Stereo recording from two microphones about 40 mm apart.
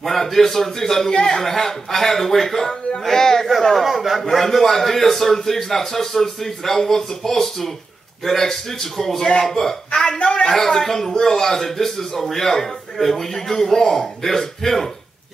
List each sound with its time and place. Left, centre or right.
0.0 s a man's voice: centre
3.8 s a man's voice: centre
9.8 s a woman's voice: left
10.5 s a man's voice: centre